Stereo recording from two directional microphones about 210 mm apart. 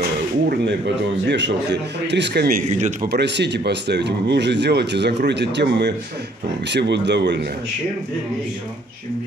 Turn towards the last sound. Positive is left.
turn(degrees=-55)  # may be behind; listen again after turning